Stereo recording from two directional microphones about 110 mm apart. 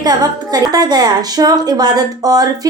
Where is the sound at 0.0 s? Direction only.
35° right (ahead or behind).